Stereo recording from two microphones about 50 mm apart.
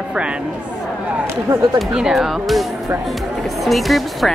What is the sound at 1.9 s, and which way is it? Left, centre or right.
Speech, centre.